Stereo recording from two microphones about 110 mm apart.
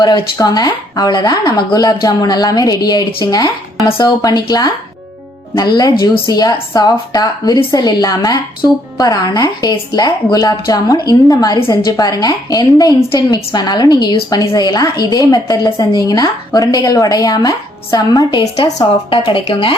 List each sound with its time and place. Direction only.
0.0 s a woman's voice: 35° left (ahead or behind)
19.1 s speech: 55° left (ahead or behind)